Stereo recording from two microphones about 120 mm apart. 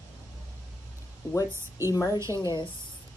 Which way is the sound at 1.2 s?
30° left (ahead or behind).